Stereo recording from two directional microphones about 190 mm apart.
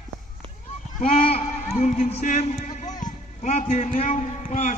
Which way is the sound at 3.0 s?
40° left (ahead or behind).